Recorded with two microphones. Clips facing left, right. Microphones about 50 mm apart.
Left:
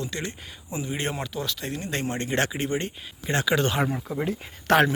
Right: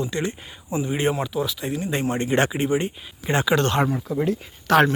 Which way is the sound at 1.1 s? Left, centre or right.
Centre.